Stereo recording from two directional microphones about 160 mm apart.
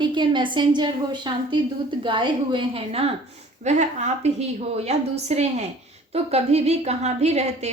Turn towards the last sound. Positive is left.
turn(degrees=-45)  # may be behind; listen again after turning